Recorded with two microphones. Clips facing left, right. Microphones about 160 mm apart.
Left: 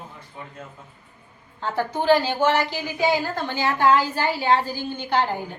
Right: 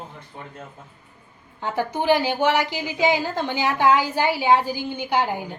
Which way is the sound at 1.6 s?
15° right (ahead or behind).